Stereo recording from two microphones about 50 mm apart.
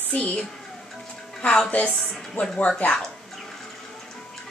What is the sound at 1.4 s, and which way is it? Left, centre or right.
Speech, centre.